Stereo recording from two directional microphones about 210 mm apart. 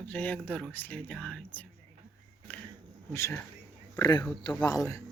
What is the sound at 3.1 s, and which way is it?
Speech, 10° left (ahead or behind).